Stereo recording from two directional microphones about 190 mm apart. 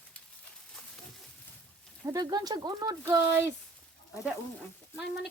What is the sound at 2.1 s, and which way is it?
Speech, 20° right (ahead or behind).